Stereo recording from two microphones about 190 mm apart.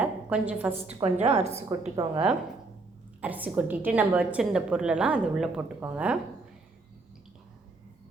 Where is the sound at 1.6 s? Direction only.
20° right (ahead or behind).